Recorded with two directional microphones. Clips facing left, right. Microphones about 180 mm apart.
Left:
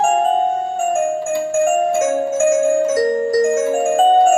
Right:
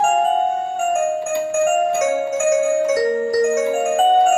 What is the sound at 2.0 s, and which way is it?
Music, 45° left (ahead or behind).